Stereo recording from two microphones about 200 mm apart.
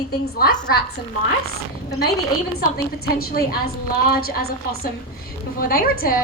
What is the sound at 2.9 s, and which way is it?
A woman's voice, 50° left (ahead or behind).